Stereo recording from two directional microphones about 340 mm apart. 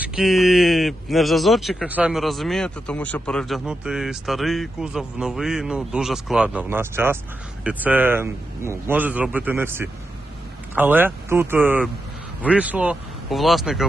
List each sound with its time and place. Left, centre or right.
0.0 s speech: centre